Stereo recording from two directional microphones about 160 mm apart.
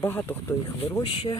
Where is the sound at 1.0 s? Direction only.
35° left (ahead or behind).